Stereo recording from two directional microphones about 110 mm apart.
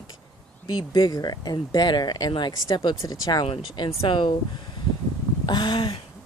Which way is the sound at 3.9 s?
55° left (ahead or behind).